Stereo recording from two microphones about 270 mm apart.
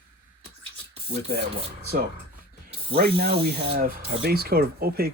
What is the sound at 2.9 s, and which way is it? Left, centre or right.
Speech, right.